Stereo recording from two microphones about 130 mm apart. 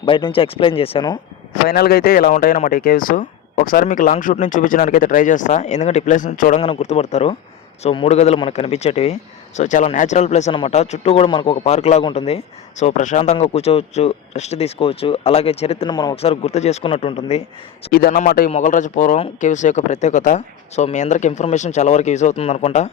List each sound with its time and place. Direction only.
0.0 s speech: 40° left (ahead or behind)
2.0 s speech: 90° left
6.6 s speech: 50° left (ahead or behind)
9.6 s speech: 65° left (ahead or behind)
10.5 s speech: 50° left (ahead or behind)
11.3 s a man's voice: 40° left (ahead or behind)
11.5 s speech: 55° left (ahead or behind)
12.8 s speech: 65° left (ahead or behind); by 15.9 s 50° left (ahead or behind)
15.9 s a man's voice: 30° left (ahead or behind)
16.1 s speech: 50° left (ahead or behind)
16.8 s speech: 45° left (ahead or behind)
17.9 s speech: 90° left
18.5 s speech: 75° left (ahead or behind); by 22.9 s 60° left (ahead or behind)